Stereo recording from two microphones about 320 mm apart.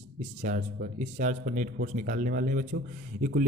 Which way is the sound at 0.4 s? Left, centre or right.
Right.